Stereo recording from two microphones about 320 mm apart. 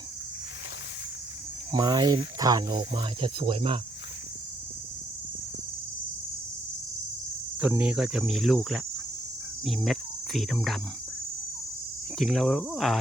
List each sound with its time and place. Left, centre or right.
1.7 s speech: centre
7.6 s cricket: centre
12.1 s cricket: centre